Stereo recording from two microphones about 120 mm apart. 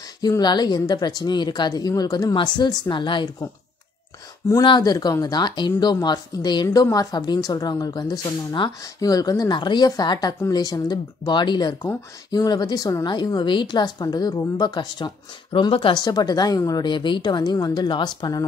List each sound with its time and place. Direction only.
0.2 s speech: 35° left (ahead or behind)
4.6 s speech: 35° left (ahead or behind)